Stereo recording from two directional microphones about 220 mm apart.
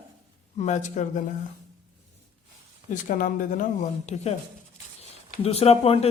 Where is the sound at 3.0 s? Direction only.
40° left (ahead or behind).